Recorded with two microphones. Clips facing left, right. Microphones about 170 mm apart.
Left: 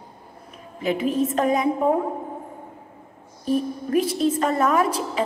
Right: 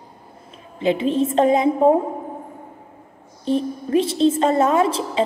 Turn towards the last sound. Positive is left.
turn(degrees=-25)  # may be behind; listen again after turning